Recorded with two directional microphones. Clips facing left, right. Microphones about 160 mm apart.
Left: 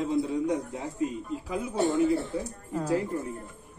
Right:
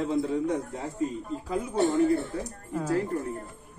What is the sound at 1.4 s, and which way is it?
Speech, 10° left (ahead or behind).